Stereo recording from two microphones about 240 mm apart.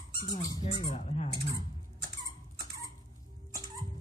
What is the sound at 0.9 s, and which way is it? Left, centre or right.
Speech, left.